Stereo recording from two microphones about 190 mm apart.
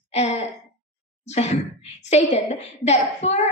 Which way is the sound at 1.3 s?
35° left (ahead or behind).